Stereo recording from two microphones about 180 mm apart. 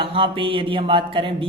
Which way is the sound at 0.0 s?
30° right (ahead or behind).